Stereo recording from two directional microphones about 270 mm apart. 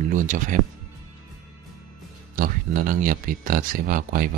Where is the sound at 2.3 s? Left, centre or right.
Right.